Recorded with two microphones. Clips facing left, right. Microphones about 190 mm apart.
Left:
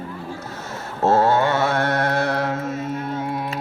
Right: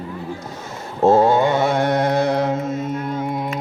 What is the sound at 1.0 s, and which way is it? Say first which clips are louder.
Mantra: right 3 dB; 15° right (ahead or behind).